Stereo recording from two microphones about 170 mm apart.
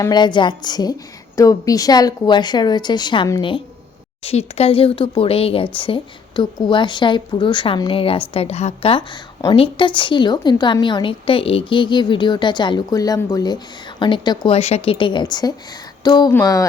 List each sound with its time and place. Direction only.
0.0 s speech: 25° left (ahead or behind)
4.2 s speech: 35° left (ahead or behind); by 16.6 s 20° left (ahead or behind)